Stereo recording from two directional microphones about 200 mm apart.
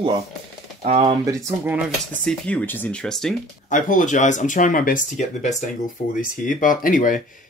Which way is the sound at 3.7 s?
40° left (ahead or behind).